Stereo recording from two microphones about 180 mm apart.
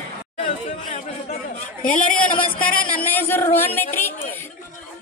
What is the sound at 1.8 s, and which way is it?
A woman's voice, 50° left (ahead or behind).